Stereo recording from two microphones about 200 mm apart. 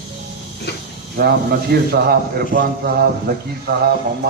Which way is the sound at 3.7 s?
50° right (ahead or behind).